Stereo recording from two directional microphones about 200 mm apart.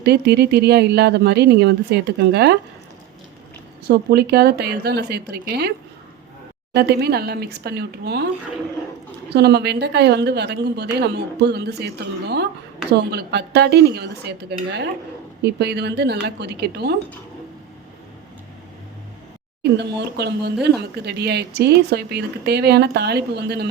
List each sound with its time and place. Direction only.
0.0 s speech: 55° right (ahead or behind)
3.8 s speech: 55° right (ahead or behind)
6.7 s speech: 55° right (ahead or behind)
9.3 s speech: 55° right (ahead or behind)
19.7 s speech: 55° right (ahead or behind)